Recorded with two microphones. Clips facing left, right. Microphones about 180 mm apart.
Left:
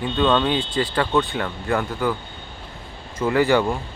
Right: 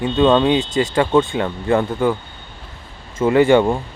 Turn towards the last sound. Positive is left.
turn(degrees=-25)  # may be behind; listen again after turning